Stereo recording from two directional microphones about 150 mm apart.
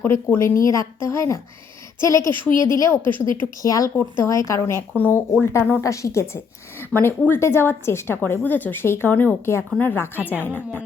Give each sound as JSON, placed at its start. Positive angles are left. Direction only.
{"t": 0.0, "sound": "a woman's voice", "side_deg": 15}
{"t": 10.2, "sound": "a woman's voice", "side_deg": -10}
{"t": 10.4, "sound": "a woman's voice", "side_deg": 10}